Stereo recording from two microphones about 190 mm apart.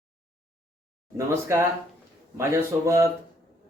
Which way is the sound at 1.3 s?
15° right (ahead or behind).